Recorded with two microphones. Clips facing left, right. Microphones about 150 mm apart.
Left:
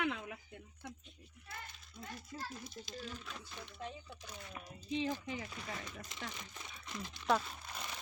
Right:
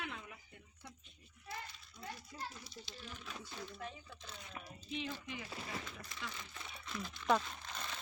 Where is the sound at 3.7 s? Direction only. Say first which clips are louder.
Left 2 dB; 20° left (ahead or behind).